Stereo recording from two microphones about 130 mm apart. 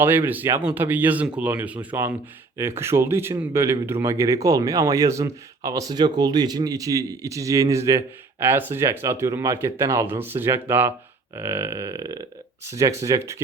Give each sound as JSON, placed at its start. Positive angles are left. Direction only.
{"t": 0.0, "sound": "speech", "side_deg": -15}